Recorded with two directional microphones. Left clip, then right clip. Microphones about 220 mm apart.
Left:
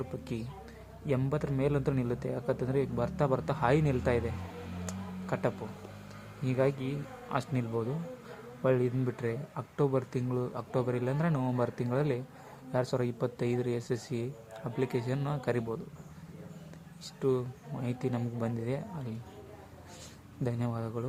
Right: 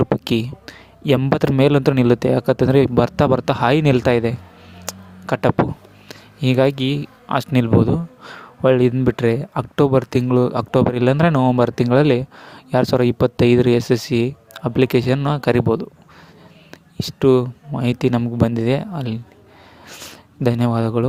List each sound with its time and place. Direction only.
0.6 s speech: 45° right (ahead or behind)
4.9 s a sound: 40° right (ahead or behind)
6.4 s speech: 45° right (ahead or behind)
20.4 s speech: 40° right (ahead or behind)